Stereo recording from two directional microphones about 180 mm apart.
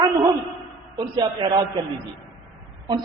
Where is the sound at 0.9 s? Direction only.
25° right (ahead or behind).